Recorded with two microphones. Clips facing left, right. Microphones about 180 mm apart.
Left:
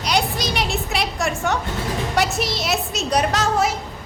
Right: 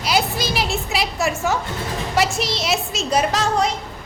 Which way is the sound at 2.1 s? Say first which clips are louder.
Right 2 dB; centre (ahead or behind).